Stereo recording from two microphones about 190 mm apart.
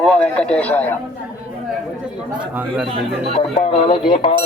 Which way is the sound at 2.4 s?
5° right (ahead or behind).